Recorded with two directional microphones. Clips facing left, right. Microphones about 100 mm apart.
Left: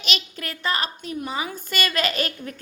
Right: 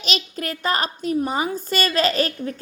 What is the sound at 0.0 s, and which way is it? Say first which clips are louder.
A woman's voice: right 4 dB; 40° right (ahead or behind).